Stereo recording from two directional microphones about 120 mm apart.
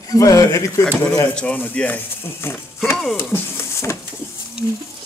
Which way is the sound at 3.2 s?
20° left (ahead or behind).